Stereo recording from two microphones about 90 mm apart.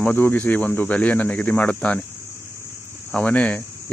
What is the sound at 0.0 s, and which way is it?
Speech, 20° left (ahead or behind).